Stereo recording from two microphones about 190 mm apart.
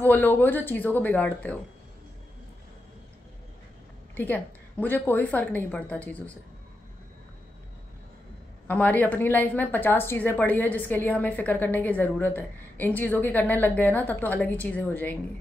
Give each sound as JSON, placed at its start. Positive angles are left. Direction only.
{"t": 0.0, "sound": "speech", "side_deg": 10}
{"t": 4.1, "sound": "speech", "side_deg": 10}
{"t": 8.6, "sound": "speech", "side_deg": 10}